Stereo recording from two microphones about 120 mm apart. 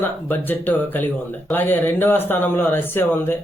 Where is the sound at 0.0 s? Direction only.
15° left (ahead or behind).